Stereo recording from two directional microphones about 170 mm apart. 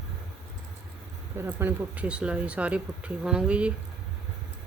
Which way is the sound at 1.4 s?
15° right (ahead or behind).